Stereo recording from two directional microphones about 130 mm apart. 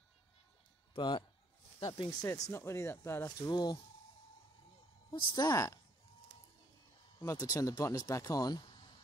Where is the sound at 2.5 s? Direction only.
20° left (ahead or behind).